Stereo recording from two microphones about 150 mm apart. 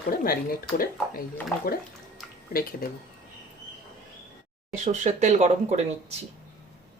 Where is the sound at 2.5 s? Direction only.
90° left.